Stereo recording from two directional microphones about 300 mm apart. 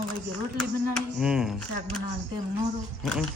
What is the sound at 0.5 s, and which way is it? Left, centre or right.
Speech, centre.